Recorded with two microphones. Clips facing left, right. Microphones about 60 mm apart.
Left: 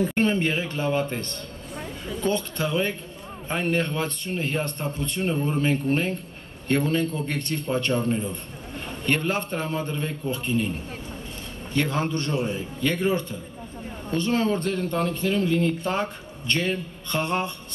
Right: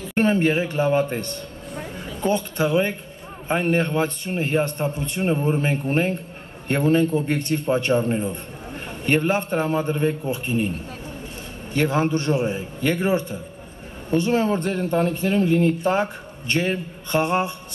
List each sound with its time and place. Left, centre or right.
0.1 s a man's voice: right
11.7 s a man's voice: right
15.8 s a man's voice: centre
17.1 s music: centre